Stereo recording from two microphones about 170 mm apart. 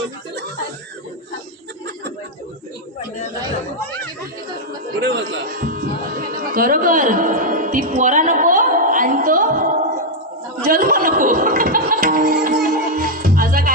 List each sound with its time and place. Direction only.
4.9 s chatter: 85° right
5.5 s music: 55° right (ahead or behind)